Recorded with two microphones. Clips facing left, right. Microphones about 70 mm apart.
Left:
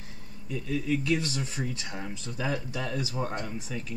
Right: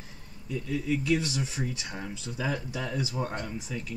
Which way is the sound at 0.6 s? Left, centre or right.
Left.